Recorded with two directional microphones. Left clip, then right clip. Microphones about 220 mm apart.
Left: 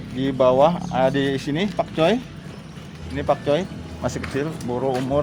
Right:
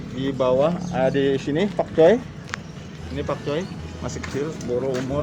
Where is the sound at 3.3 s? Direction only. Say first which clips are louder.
Left 7 dB; 55° left (ahead or behind).